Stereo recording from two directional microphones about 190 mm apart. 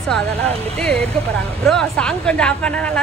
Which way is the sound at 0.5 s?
30° right (ahead or behind).